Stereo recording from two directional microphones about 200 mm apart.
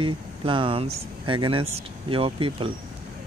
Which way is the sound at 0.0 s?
25° right (ahead or behind).